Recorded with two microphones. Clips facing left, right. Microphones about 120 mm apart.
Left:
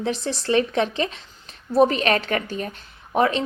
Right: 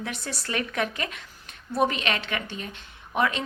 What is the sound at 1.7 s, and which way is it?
Speech, 40° left (ahead or behind).